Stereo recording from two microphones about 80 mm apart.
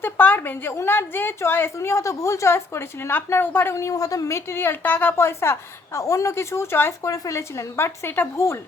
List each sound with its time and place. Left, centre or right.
0.0 s a woman's voice: left
7.0 s a woman's voice: left